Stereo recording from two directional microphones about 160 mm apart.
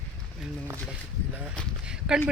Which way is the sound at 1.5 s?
5° right (ahead or behind).